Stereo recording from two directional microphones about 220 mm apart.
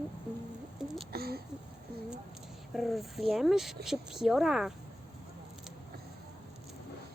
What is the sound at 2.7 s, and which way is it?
A woman's voice, centre (ahead or behind).